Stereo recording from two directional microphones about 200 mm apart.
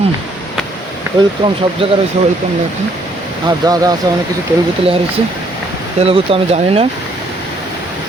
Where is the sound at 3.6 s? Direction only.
20° right (ahead or behind).